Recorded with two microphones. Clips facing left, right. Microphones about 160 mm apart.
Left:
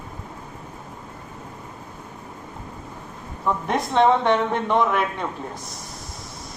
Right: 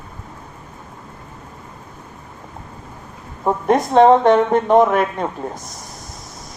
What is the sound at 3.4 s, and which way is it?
Speech, 45° right (ahead or behind).